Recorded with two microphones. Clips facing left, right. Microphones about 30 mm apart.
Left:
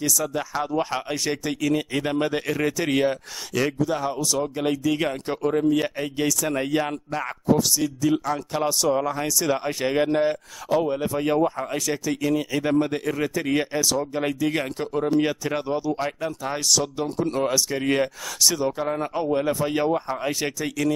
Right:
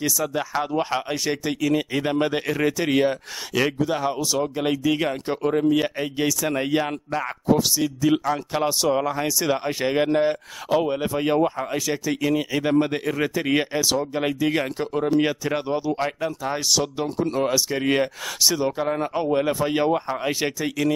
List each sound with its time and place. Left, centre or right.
0.0 s speech: centre
3.5 s speech: right
9.1 s speech: centre
10.7 s speech: right
14.1 s speech: centre